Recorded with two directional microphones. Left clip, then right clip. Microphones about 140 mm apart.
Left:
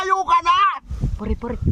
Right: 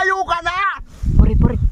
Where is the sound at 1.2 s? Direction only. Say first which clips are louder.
Right 6 dB; 5° right (ahead or behind).